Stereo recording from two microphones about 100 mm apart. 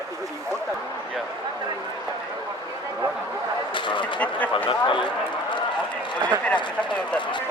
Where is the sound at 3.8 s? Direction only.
55° left (ahead or behind).